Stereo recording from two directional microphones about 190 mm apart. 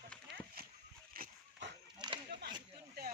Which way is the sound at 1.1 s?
50° right (ahead or behind).